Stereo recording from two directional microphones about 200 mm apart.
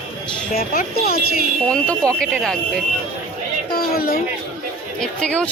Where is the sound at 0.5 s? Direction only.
45° left (ahead or behind).